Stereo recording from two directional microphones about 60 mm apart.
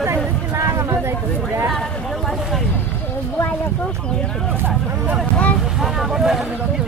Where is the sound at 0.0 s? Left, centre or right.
Right.